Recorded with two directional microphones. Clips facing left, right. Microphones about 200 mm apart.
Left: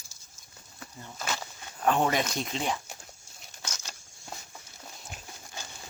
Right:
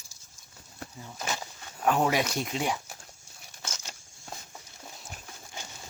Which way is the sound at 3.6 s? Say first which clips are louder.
Right 1 dB; 25° right (ahead or behind).